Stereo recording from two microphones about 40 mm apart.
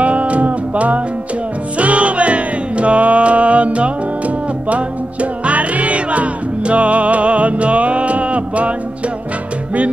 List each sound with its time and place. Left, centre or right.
0.0 s music: right